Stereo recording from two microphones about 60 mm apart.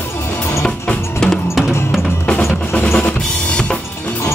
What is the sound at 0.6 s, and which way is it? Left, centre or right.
Drum, centre.